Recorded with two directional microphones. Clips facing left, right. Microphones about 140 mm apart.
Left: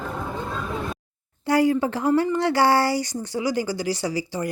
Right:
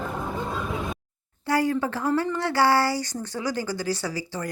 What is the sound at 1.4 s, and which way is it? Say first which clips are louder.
Speech: left 4 dB; 15° left (ahead or behind).